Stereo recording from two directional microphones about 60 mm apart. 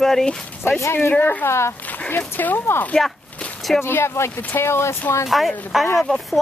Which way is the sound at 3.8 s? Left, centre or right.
Left.